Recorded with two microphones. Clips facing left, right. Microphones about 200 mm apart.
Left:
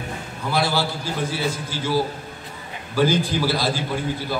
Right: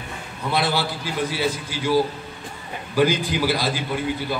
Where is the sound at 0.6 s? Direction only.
15° right (ahead or behind).